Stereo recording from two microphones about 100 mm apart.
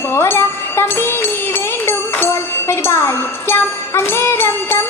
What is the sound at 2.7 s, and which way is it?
Music, 25° left (ahead or behind).